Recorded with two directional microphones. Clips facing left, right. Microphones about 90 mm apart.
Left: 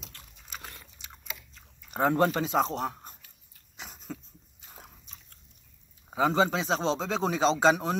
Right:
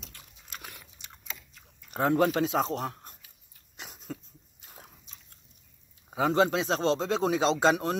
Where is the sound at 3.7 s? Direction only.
5° right (ahead or behind).